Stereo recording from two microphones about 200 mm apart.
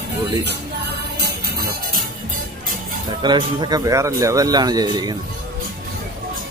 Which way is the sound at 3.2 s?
20° right (ahead or behind).